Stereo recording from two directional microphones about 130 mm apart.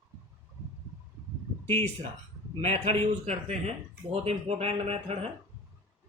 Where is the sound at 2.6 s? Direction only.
50° right (ahead or behind).